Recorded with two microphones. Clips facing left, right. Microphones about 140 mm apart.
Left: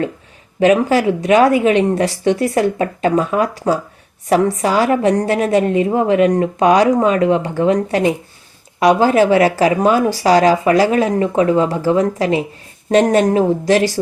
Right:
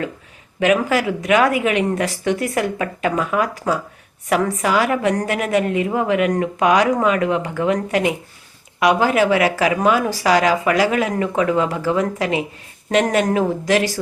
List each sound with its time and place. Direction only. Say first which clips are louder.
0.6 s a woman's voice: left 5 dB; 30° left (ahead or behind)